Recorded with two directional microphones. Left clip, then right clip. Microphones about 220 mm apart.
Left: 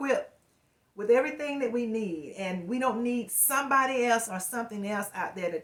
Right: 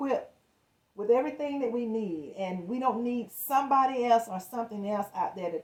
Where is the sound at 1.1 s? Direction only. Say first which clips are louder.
Left 2 dB; 5° left (ahead or behind).